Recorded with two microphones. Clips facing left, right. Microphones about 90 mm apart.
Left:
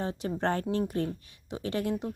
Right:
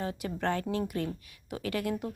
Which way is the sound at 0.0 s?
30° left (ahead or behind).